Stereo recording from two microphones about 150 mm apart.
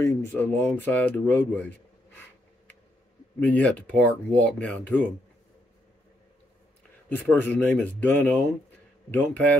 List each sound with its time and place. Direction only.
0.0 s speech: 20° left (ahead or behind)
0.7 s speech: 10° left (ahead or behind)
3.3 s speech: 10° left (ahead or behind)
7.1 s speech: 10° left (ahead or behind)